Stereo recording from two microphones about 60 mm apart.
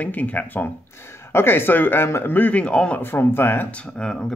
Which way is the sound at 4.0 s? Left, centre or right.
Centre.